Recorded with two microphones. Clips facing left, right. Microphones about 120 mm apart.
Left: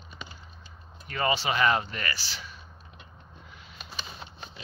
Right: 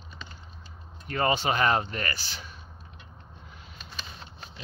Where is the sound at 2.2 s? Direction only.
50° right (ahead or behind).